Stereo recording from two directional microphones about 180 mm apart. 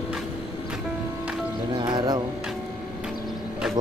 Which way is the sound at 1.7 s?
25° right (ahead or behind).